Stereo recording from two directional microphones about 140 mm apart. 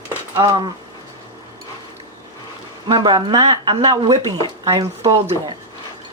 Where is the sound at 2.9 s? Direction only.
30° right (ahead or behind).